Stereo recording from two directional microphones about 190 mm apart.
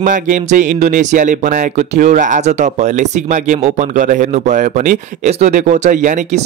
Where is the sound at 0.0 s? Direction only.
40° right (ahead or behind).